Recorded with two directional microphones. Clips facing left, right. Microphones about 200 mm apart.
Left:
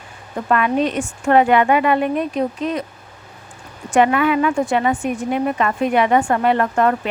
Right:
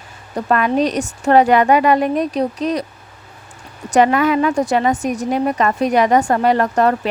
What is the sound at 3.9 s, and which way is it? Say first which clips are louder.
A woman's voice: right 2 dB; 40° right (ahead or behind).